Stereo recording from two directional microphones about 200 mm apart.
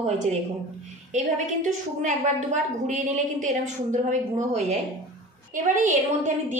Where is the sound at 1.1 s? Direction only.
35° right (ahead or behind).